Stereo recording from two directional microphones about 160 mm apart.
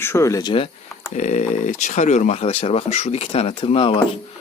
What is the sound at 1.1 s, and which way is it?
Speech, 45° left (ahead or behind).